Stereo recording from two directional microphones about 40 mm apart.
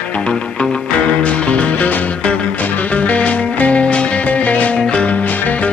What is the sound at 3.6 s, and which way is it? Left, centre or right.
Music, left.